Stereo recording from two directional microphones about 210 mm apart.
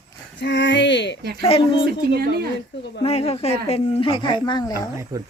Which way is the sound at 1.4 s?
25° left (ahead or behind).